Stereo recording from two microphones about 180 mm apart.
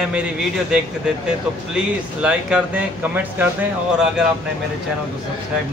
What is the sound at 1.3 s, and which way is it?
Speech, 5° right (ahead or behind).